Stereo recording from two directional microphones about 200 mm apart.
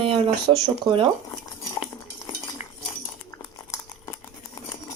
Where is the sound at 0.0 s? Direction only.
25° right (ahead or behind).